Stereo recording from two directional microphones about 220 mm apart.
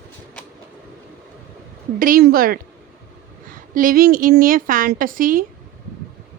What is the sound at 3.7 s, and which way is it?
Speech, 40° right (ahead or behind).